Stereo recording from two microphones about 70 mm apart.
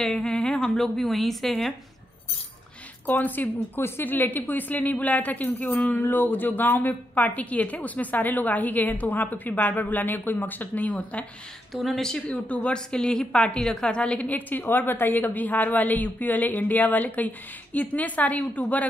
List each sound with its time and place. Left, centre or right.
0.0 s a woman's voice: centre
3.1 s a woman's voice: left
11.7 s speech: centre
12.3 s a woman's voice: centre
14.5 s a woman's voice: left